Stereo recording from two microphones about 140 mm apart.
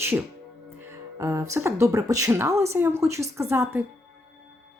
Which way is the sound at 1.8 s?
25° right (ahead or behind).